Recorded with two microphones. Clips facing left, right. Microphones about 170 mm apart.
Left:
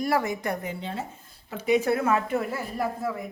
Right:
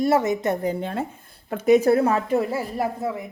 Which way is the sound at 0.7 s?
55° right (ahead or behind).